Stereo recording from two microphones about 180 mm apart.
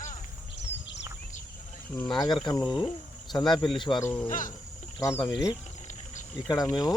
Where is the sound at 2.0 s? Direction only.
20° left (ahead or behind).